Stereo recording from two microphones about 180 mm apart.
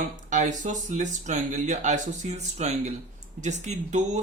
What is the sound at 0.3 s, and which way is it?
Speech, 45° right (ahead or behind).